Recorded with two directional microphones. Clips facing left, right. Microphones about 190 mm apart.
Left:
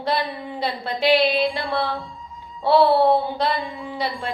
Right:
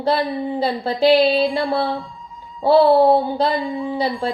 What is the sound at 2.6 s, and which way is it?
Speech, 35° right (ahead or behind).